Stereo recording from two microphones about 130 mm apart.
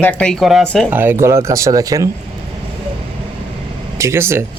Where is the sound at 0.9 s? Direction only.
15° right (ahead or behind).